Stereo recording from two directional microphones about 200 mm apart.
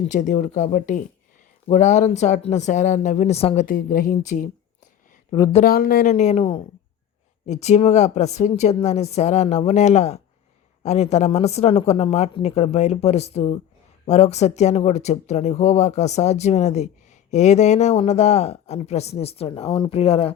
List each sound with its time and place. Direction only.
0.1 s speech: 40° left (ahead or behind)
5.3 s speech: 20° left (ahead or behind)
5.6 s speech: 50° left (ahead or behind); by 20.3 s 30° left (ahead or behind)